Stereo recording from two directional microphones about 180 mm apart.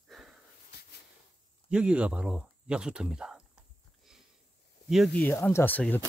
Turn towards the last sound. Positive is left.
turn(degrees=10)  # may be behind; listen again after turning